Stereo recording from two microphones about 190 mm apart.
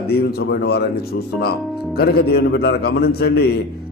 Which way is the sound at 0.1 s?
55° left (ahead or behind).